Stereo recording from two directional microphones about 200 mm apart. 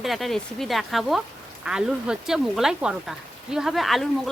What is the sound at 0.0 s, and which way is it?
Speech, centre (ahead or behind).